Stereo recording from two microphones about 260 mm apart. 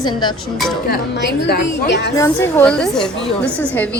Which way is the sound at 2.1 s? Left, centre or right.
Centre.